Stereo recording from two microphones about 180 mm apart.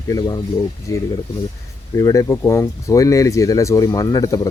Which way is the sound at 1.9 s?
20° left (ahead or behind).